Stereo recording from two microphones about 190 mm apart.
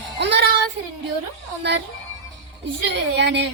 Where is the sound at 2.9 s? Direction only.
65° right (ahead or behind).